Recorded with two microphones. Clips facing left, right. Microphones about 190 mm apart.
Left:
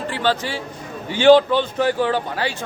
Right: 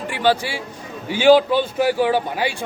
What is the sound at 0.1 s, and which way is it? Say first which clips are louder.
A man's voice: right 4 dB; 10° right (ahead or behind).